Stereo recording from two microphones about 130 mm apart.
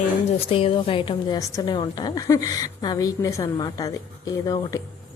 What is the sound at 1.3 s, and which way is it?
A woman's voice, 25° left (ahead or behind).